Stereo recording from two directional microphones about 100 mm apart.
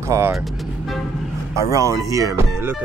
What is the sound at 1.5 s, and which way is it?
Speech, 30° right (ahead or behind).